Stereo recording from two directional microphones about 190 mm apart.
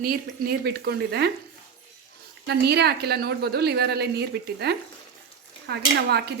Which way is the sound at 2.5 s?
60° right (ahead or behind).